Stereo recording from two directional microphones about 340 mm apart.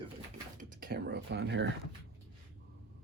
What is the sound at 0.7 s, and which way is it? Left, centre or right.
Speech, right.